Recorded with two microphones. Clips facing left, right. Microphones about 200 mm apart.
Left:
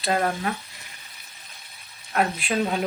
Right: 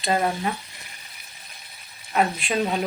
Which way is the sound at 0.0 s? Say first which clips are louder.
Right 1 dB; 5° right (ahead or behind).